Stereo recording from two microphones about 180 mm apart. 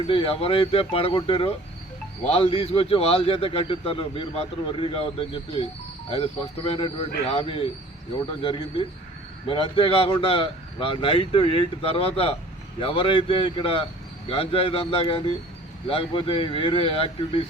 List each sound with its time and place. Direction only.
0.1 s speech: 30° left (ahead or behind)